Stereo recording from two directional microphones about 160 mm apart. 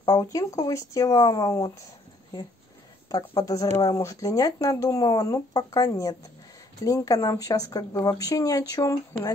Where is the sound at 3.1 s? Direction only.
25° left (ahead or behind).